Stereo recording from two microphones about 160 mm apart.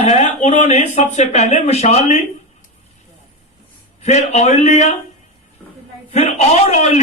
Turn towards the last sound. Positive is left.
turn(degrees=45)  # may be behind; listen again after turning